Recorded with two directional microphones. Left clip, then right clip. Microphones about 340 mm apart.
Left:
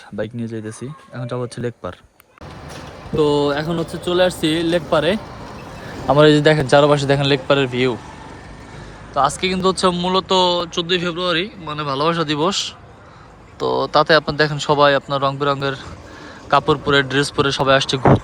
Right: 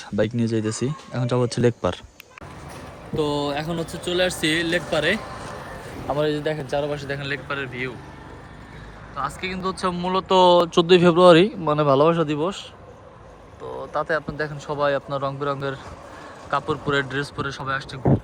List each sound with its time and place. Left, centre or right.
0.2 s speech: centre
3.2 s speech: centre
6.1 s speech: left
9.1 s speech: centre